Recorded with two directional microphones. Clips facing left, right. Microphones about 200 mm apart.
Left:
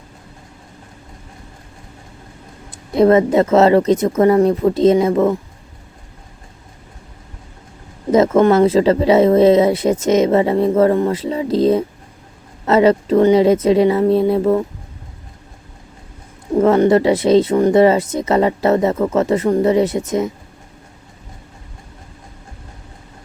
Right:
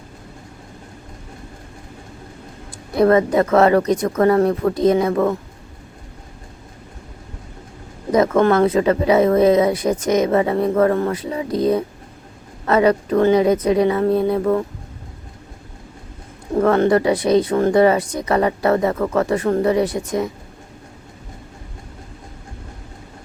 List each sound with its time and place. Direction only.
2.9 s speech: 20° left (ahead or behind)
8.1 s speech: 25° left (ahead or behind)
16.6 s speech: 20° left (ahead or behind)